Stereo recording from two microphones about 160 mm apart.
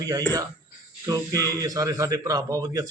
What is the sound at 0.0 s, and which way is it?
A man's voice, 20° right (ahead or behind).